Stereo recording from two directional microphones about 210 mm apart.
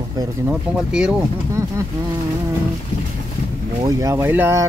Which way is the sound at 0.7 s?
5° right (ahead or behind).